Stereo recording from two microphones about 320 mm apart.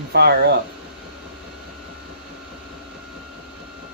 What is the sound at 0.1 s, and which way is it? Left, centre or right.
Speech, right.